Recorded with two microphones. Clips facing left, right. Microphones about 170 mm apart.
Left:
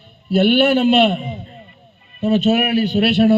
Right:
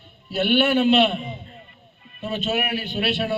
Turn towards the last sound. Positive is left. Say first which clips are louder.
# left 11 dB
turn(degrees=40)  # may be behind; listen again after turning